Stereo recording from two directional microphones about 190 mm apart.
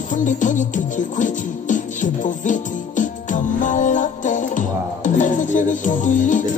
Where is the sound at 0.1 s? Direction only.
40° left (ahead or behind).